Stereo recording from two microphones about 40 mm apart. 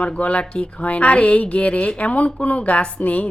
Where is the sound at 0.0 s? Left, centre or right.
Left.